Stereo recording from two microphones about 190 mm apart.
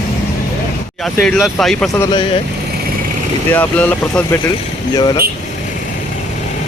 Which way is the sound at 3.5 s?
10° left (ahead or behind).